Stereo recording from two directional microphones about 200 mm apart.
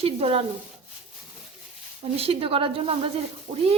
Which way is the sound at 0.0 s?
30° right (ahead or behind).